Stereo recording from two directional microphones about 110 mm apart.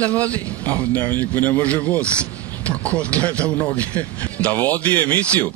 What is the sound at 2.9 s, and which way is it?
Speech, 10° left (ahead or behind).